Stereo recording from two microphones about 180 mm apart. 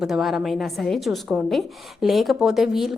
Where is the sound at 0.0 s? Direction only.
Centre (ahead or behind).